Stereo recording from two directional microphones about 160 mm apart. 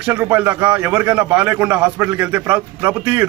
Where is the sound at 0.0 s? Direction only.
10° right (ahead or behind).